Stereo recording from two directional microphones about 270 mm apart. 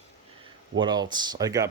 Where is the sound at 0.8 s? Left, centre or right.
Centre.